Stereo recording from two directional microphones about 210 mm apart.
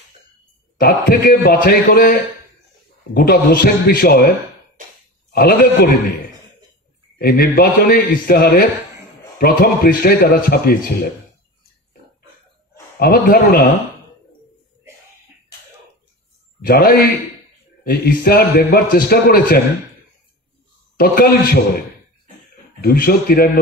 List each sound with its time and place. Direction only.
0.7 s a man's voice: 45° left (ahead or behind)
3.2 s a man's voice: 45° left (ahead or behind)
4.8 s a sound: 40° right (ahead or behind)
5.3 s a man's voice: 45° left (ahead or behind)
7.2 s a man's voice: 45° left (ahead or behind)
13.0 s a man's voice: 45° left (ahead or behind)
16.6 s a man's voice: 45° left (ahead or behind)
21.0 s a man's voice: 45° left (ahead or behind)
22.8 s a man's voice: 45° left (ahead or behind)